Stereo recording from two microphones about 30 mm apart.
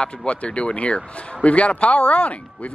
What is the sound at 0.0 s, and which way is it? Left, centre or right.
Speech, left.